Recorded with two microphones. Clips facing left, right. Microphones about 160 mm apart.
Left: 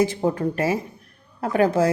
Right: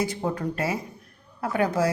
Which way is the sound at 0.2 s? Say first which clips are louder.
Left 5 dB; 30° left (ahead or behind).